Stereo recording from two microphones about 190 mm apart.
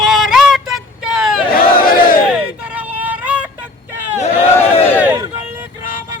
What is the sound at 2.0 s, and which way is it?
Battle cry, 45° left (ahead or behind).